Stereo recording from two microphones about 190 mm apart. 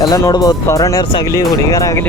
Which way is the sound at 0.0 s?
20° left (ahead or behind).